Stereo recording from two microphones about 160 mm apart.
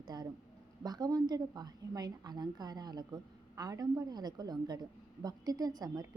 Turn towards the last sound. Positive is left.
turn(degrees=-25)  # may be behind; listen again after turning